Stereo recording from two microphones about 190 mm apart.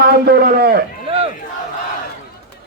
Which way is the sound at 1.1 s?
30° right (ahead or behind).